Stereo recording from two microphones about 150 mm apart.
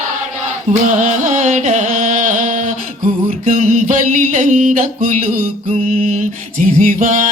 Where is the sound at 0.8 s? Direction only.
55° right (ahead or behind).